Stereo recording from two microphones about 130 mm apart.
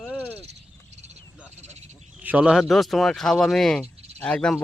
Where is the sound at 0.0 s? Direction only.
5° left (ahead or behind).